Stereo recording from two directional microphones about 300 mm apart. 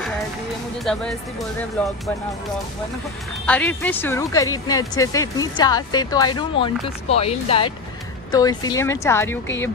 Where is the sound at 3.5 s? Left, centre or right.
Centre.